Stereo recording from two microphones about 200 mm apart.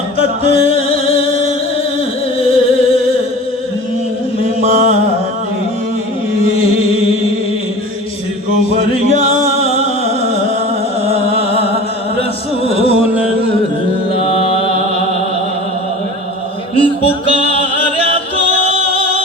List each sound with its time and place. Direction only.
0.2 s music: 30° left (ahead or behind)
2.4 s music: 30° left (ahead or behind)
4.4 s a sound: 35° right (ahead or behind)
6.5 s music: 30° left (ahead or behind)
9.6 s music: 30° left (ahead or behind)
11.0 s music: 30° left (ahead or behind)
16.7 s music: 25° left (ahead or behind)